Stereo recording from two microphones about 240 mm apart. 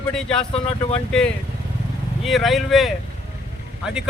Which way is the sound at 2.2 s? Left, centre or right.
Centre.